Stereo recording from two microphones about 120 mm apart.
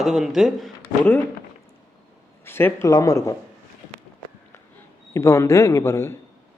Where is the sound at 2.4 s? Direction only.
20° left (ahead or behind).